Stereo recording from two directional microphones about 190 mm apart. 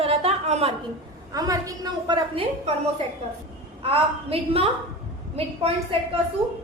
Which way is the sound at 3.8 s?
30° right (ahead or behind).